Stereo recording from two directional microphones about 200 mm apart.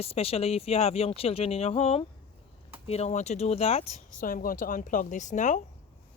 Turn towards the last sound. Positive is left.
turn(degrees=40)  # may be behind; listen again after turning